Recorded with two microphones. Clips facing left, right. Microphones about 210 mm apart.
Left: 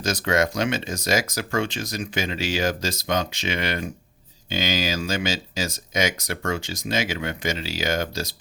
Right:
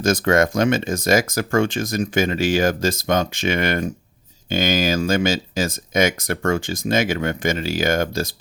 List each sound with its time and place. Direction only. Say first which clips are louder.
0.0 s speech: right 5 dB; 50° right (ahead or behind)